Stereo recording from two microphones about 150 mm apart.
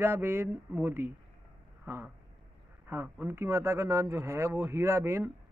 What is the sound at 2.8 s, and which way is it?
Speech, 15° right (ahead or behind).